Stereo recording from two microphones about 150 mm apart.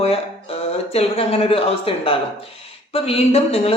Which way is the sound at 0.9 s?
40° left (ahead or behind).